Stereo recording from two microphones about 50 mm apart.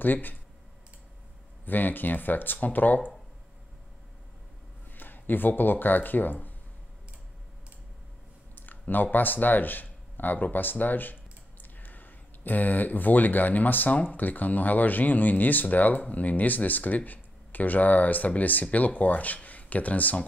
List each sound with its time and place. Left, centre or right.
0.0 s speech: left
1.7 s speech: left
4.9 s speech: left
8.5 s speech: left